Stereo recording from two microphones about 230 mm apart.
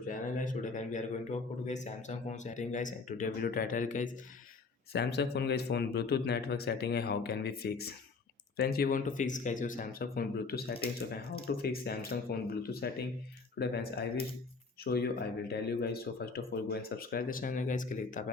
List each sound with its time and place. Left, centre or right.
0.1 s a man's voice: left
4.9 s a man's voice: left